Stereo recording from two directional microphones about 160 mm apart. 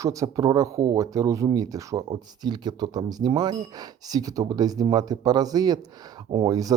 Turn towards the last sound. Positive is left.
turn(degrees=-25)  # may be behind; listen again after turning